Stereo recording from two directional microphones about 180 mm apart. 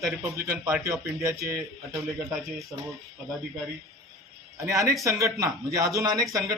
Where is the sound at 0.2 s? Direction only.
15° right (ahead or behind).